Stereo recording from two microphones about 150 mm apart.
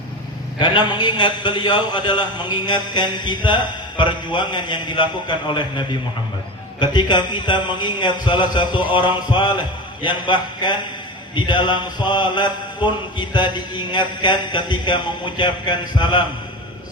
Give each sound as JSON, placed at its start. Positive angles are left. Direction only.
{"t": 0.6, "sound": "a man's voice", "side_deg": 30}